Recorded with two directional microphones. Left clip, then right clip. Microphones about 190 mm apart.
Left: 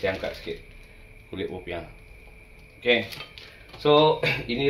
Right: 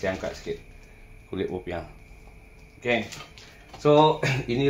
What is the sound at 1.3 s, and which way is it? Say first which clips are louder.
Speech: right 2 dB; 45° right (ahead or behind).